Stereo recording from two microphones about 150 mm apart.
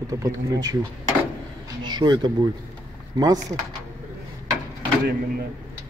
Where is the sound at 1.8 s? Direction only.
30° right (ahead or behind).